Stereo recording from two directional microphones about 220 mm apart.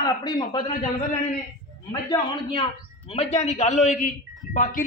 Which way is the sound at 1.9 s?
20° left (ahead or behind).